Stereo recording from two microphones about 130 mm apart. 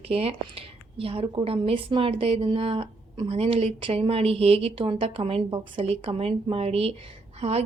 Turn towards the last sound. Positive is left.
turn(degrees=-55)  # may be behind; listen again after turning